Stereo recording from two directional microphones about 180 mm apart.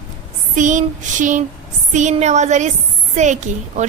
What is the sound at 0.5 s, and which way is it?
A woman's voice, 45° right (ahead or behind).